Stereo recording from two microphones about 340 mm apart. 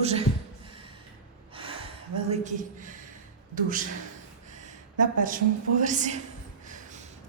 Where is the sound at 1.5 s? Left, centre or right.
Centre.